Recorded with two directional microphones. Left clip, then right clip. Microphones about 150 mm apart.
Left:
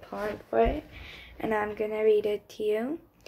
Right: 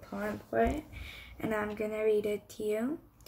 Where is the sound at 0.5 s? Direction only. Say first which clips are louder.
Left 5 dB; 25° right (ahead or behind).